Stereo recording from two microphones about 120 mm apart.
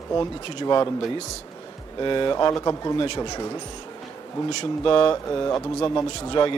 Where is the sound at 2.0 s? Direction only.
40° left (ahead or behind).